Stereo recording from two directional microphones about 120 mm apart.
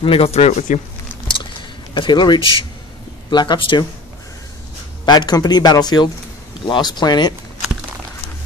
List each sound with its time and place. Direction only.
0.0 s speech: 50° left (ahead or behind); by 0.7 s 70° left (ahead or behind)
1.2 s typing: 40° left (ahead or behind)
3.3 s speech: 40° left (ahead or behind)
5.0 s speech: 35° left (ahead or behind)